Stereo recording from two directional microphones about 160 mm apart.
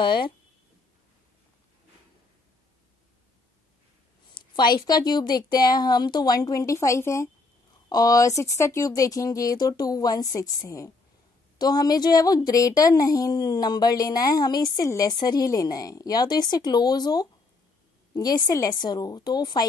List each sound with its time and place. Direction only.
0.0 s a woman's voice: 30° left (ahead or behind)
4.3 s a woman's voice: 25° left (ahead or behind)